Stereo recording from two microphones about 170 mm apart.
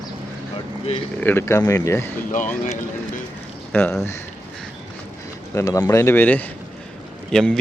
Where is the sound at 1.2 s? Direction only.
15° left (ahead or behind).